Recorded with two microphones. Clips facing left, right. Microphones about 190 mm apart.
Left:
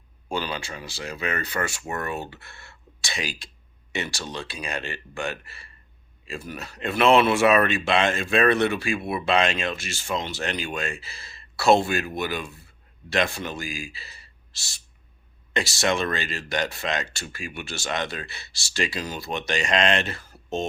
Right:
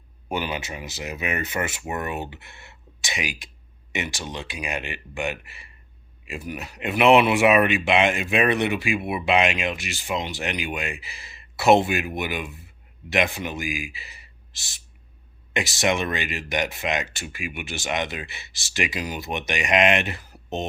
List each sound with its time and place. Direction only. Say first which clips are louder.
0.3 s speech: right 1 dB; 20° right (ahead or behind)